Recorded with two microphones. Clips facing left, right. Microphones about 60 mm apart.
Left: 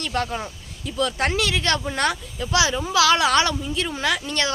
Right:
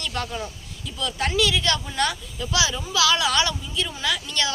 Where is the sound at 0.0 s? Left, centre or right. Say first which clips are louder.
Left 4 dB; left.